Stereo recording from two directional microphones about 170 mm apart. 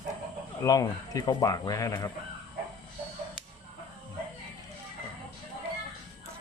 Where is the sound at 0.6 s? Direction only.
20° left (ahead or behind).